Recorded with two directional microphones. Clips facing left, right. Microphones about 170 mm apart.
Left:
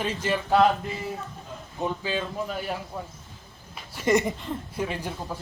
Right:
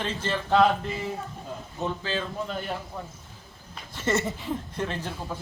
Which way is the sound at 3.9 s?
10° left (ahead or behind).